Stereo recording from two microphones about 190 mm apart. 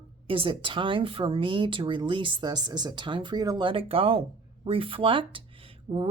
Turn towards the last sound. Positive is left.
turn(degrees=-25)  # may be behind; listen again after turning